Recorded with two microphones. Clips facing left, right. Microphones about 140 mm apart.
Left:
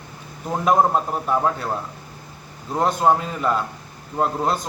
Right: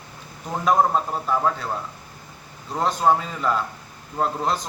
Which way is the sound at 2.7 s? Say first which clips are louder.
Left 2 dB; 10° left (ahead or behind).